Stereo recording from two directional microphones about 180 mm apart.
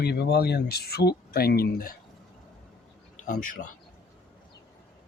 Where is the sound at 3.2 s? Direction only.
50° left (ahead or behind).